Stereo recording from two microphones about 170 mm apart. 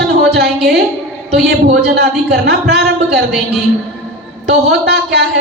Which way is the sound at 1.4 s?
75° right (ahead or behind).